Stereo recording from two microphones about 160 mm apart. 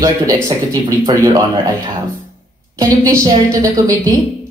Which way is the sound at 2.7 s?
20° right (ahead or behind).